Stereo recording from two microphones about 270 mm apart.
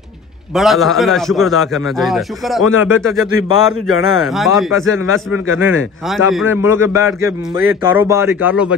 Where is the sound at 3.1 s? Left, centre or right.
Centre.